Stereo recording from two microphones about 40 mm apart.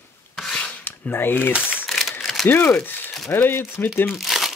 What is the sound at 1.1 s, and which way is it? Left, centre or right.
Speech, left.